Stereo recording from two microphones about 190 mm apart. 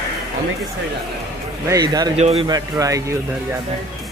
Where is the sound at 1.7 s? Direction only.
20° right (ahead or behind).